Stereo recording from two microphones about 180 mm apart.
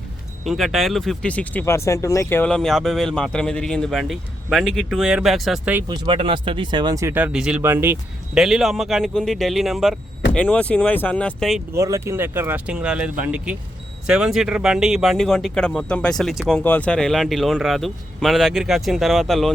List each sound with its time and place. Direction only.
0.4 s speech: centre (ahead or behind)
5.9 s speech: 30° right (ahead or behind); by 7.9 s 15° right (ahead or behind)
8.4 s speech: centre (ahead or behind)
11.7 s speech: 15° right (ahead or behind); by 19.5 s centre (ahead or behind)